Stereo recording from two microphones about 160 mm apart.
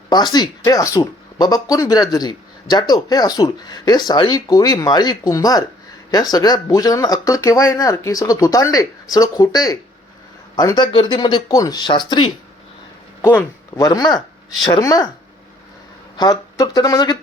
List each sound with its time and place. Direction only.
0.1 s speech: 25° left (ahead or behind)
13.2 s speech: 15° left (ahead or behind)
16.1 s speech: 25° left (ahead or behind)